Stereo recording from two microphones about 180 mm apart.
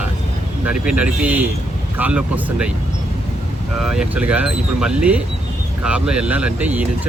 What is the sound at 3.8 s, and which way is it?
Speech, 5° right (ahead or behind).